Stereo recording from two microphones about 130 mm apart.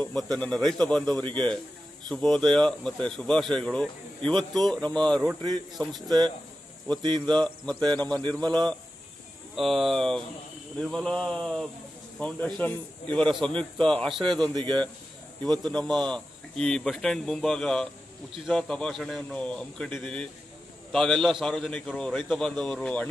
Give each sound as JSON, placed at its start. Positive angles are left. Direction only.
{"t": 0.0, "sound": "a man's voice", "side_deg": 5}
{"t": 6.0, "sound": "speech", "side_deg": -30}
{"t": 7.4, "sound": "a man's voice", "side_deg": 10}
{"t": 9.6, "sound": "a man's voice", "side_deg": 0}
{"t": 14.5, "sound": "speech", "side_deg": -35}
{"t": 15.6, "sound": "speech", "side_deg": 5}